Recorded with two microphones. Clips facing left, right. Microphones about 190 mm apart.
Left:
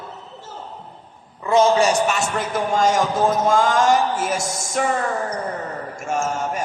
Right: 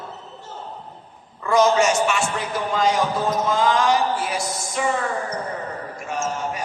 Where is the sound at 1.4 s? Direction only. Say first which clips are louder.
Left 1 dB; 25° left (ahead or behind); by 4.8 s 45° left (ahead or behind).